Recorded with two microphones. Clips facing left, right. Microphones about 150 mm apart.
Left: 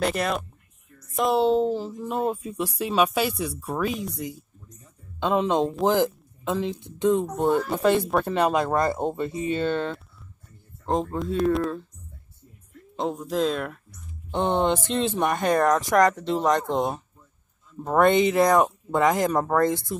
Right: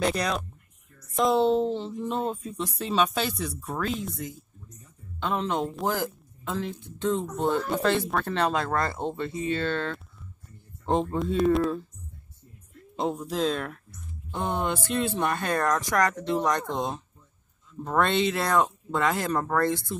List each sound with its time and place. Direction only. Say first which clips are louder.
0.0 s speech: left 2 dB; 5° left (ahead or behind)
5.2 s speech: left 6 dB; 15° left (ahead or behind)
10.9 s speech: even; centre (ahead or behind)
12.9 s speech: left 2 dB; centre (ahead or behind)
14.3 s speech: left 6 dB; 20° left (ahead or behind)